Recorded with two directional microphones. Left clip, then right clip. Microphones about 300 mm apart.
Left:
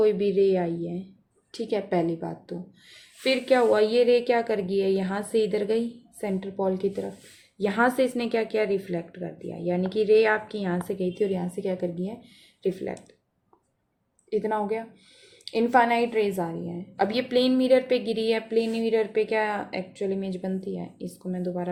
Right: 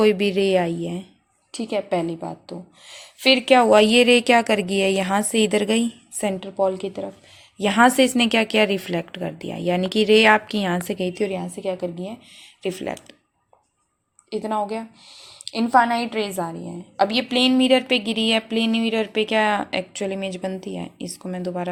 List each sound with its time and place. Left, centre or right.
0.0 s speech: right
1.5 s a woman's voice: centre; by 6.3 s right
6.4 s a woman's voice: centre
7.6 s speech: right
12.6 s speech: right
14.3 s a woman's voice: centre; by 21.7 s right